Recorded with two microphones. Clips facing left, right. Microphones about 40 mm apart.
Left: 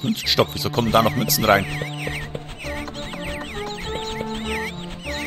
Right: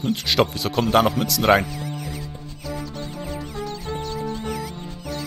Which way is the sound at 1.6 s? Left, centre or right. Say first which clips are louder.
Left 3 dB; left.